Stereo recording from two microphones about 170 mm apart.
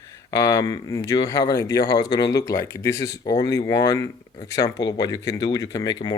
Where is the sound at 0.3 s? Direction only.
20° left (ahead or behind).